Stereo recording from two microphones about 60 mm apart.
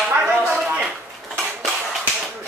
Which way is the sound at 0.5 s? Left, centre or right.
Right.